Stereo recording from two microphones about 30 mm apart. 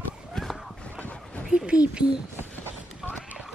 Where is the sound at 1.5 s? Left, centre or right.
Right.